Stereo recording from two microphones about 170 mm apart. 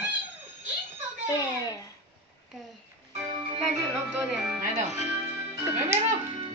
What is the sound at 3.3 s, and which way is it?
Music, 30° right (ahead or behind).